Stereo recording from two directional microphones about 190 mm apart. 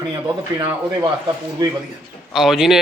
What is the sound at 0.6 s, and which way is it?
Speech, 15° right (ahead or behind).